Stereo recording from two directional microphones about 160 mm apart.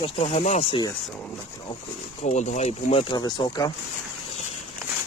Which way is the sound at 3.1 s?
25° left (ahead or behind).